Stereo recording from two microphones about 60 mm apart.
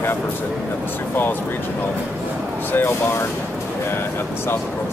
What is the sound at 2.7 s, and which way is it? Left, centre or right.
Speech, left.